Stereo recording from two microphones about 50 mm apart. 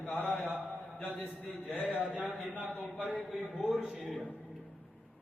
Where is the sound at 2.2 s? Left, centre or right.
Right.